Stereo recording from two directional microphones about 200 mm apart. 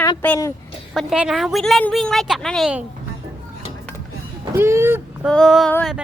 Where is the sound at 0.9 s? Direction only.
5° right (ahead or behind).